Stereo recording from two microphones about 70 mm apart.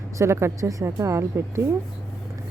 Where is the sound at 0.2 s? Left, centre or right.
Right.